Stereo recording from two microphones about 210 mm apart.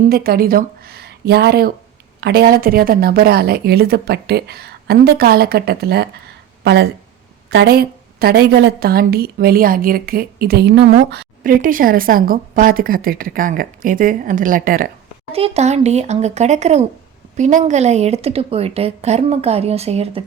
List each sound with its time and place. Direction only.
0.1 s a woman's voice: 45° right (ahead or behind)
15.3 s a woman's voice: 30° right (ahead or behind)